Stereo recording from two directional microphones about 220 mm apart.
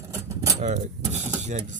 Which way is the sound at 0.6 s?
35° right (ahead or behind).